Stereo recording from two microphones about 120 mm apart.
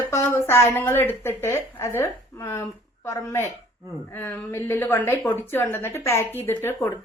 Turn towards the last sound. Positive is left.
turn(degrees=20)  # may be behind; listen again after turning